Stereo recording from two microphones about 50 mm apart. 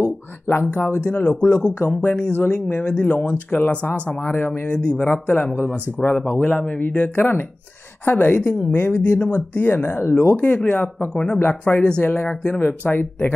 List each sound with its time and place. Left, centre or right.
0.0 s speech: left; by 3.0 s centre
3.0 s speech: left
4.6 s speech: left
5.1 s speech: left
6.5 s speech: left
7.0 s speech: left
10.3 s speech: left